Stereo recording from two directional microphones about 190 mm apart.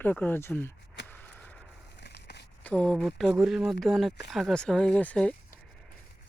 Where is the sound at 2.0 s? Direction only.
60° left (ahead or behind).